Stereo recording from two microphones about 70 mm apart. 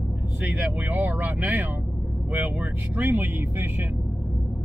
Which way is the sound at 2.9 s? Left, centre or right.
Right.